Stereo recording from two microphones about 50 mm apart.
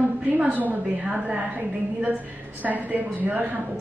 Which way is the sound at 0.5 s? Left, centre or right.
Right.